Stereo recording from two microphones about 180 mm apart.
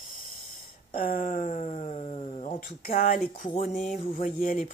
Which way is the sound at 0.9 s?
55° left (ahead or behind).